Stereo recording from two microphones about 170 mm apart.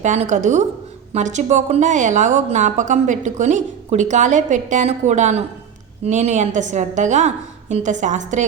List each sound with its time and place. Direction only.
0.0 s speech: 45° right (ahead or behind)